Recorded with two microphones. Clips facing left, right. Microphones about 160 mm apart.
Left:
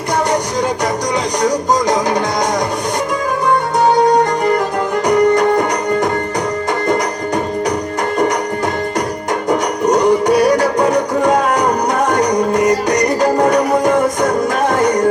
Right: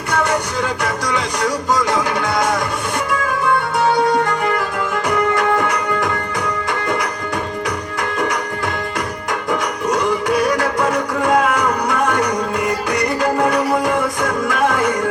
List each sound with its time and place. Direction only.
0.1 s music: 35° left (ahead or behind)
3.4 s music: 40° left (ahead or behind)
9.5 s music: 40° left (ahead or behind)